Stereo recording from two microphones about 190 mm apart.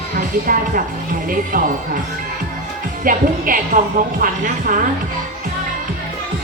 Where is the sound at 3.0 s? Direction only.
45° right (ahead or behind).